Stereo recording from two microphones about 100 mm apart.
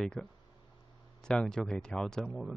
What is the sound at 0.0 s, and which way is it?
Speech, 10° left (ahead or behind).